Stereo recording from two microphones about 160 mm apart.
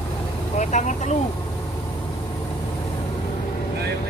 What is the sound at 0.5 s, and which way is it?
Speech, 50° left (ahead or behind).